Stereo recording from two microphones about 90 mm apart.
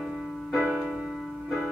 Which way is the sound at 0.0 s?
Centre (ahead or behind).